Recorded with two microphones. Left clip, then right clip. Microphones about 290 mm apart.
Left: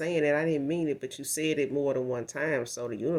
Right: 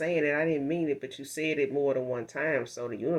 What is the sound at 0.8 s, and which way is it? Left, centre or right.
Speech, left.